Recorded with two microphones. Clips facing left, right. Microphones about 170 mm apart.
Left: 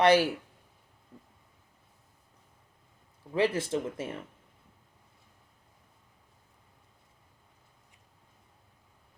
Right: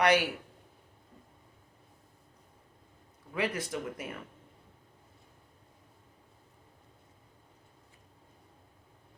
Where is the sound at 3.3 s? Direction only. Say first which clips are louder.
Left 6 dB; 30° left (ahead or behind).